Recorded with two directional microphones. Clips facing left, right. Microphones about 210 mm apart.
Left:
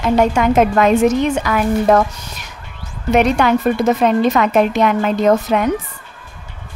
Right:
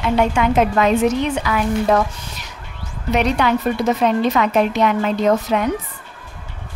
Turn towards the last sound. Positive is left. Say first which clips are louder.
# left 3 dB
turn(degrees=55)  # may be behind; listen again after turning